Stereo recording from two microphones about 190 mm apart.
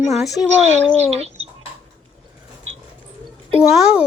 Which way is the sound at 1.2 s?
35° right (ahead or behind).